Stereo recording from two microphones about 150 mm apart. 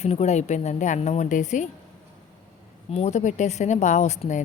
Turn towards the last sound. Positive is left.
turn(degrees=50)  # may be behind; listen again after turning